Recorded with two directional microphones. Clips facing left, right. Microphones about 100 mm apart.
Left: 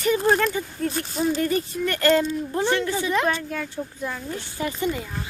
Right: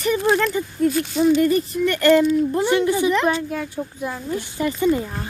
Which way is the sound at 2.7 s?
15° right (ahead or behind).